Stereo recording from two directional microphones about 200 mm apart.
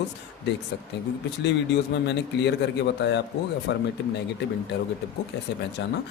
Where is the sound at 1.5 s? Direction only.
60° left (ahead or behind).